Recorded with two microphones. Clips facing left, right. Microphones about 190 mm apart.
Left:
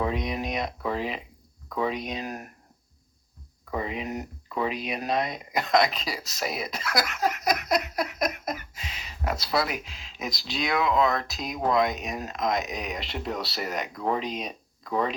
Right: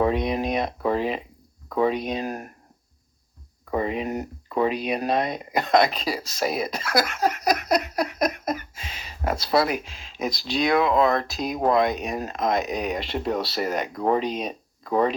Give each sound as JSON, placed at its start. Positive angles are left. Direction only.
{"t": 0.0, "sound": "speech", "side_deg": -55}
{"t": 2.2, "sound": "speech", "side_deg": -35}
{"t": 3.7, "sound": "speech", "side_deg": -45}
{"t": 4.5, "sound": "speech", "side_deg": -45}
{"t": 7.9, "sound": "a sound", "side_deg": -45}
{"t": 9.2, "sound": "speech", "side_deg": -45}
{"t": 11.3, "sound": "speech", "side_deg": -35}
{"t": 12.2, "sound": "speech", "side_deg": -50}
{"t": 12.6, "sound": "speech", "side_deg": -35}
{"t": 12.9, "sound": "speech", "side_deg": -45}
{"t": 14.4, "sound": "a sound", "side_deg": -50}